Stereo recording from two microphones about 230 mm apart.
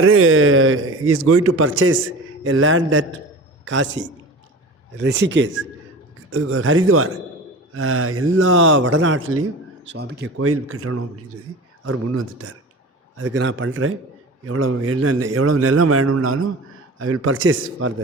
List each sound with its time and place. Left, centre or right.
0.0 s speech: right
9.0 s speech: right
9.9 s speech: right
10.3 s a man's voice: right
13.1 s a man's voice: right